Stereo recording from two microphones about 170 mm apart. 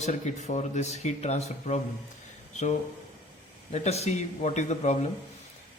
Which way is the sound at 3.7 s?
40° left (ahead or behind).